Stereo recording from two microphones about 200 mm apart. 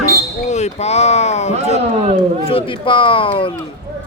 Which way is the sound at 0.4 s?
35° left (ahead or behind).